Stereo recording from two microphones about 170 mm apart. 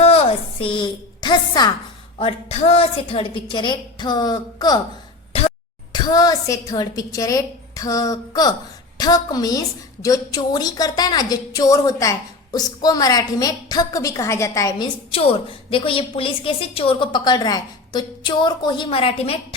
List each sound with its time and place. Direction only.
0.0 s a sound: 35° left (ahead or behind)
2.1 s a woman's voice: 35° left (ahead or behind)
5.9 s a woman's voice: 25° left (ahead or behind)
15.1 s a woman's voice: 35° left (ahead or behind)